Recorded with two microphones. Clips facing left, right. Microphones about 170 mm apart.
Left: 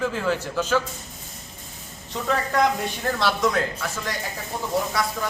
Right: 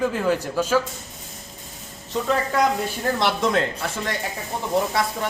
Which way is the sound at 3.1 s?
25° right (ahead or behind).